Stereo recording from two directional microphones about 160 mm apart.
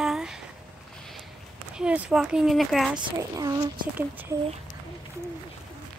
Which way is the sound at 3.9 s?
10° right (ahead or behind).